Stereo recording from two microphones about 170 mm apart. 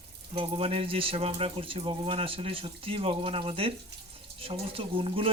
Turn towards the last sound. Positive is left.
turn(degrees=-30)  # may be behind; listen again after turning